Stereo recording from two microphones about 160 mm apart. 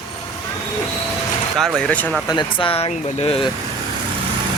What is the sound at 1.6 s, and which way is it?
Speech, 5° left (ahead or behind).